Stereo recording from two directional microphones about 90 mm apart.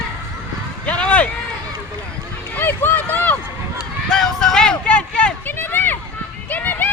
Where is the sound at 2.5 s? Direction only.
20° left (ahead or behind).